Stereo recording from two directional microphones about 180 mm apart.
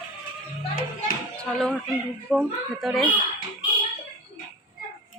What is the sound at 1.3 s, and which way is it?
A child's voice, centre (ahead or behind).